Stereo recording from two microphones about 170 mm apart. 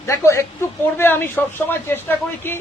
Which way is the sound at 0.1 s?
15° left (ahead or behind).